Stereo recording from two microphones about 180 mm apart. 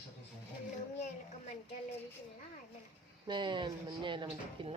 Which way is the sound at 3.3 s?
25° right (ahead or behind).